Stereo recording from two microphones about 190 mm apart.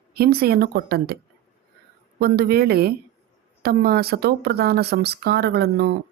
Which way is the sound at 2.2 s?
55° right (ahead or behind).